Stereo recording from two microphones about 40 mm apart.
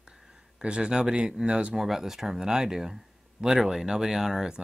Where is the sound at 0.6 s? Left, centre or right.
Right.